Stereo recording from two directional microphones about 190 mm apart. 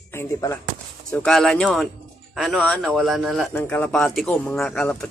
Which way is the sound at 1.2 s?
5° left (ahead or behind).